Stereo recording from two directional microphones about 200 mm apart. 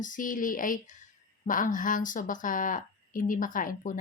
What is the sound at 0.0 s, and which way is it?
A woman's voice, 40° left (ahead or behind).